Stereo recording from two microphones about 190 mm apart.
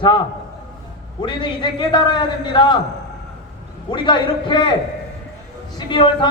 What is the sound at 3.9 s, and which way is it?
Speech, 25° left (ahead or behind).